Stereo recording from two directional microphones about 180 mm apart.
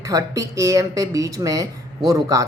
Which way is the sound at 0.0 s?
20° right (ahead or behind).